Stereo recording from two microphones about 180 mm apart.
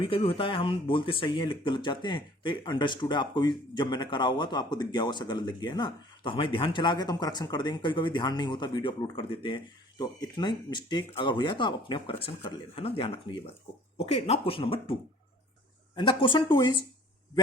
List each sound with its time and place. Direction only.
0.0 s speech: 30° left (ahead or behind)
16.0 s speech: 25° left (ahead or behind)